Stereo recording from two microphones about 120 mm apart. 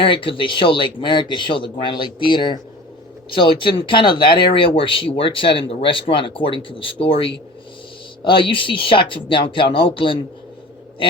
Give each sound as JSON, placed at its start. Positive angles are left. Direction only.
{"t": 0.0, "sound": "speech", "side_deg": 50}